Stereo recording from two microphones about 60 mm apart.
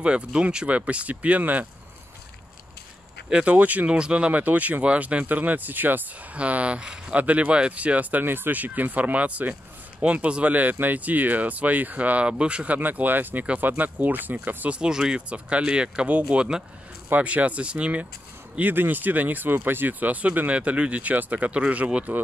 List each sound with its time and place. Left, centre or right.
0.0 s speech: centre
3.3 s speech: centre
3.5 s speech: right
6.3 s speech: right
14.8 s speech: centre
18.6 s speech: right